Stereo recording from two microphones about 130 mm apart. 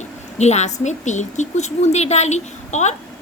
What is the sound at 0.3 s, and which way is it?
A woman's voice, 60° left (ahead or behind).